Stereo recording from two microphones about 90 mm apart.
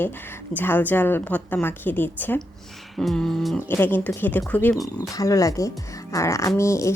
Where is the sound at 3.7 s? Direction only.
25° left (ahead or behind).